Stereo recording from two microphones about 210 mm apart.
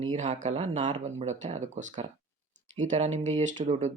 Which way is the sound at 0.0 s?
35° right (ahead or behind).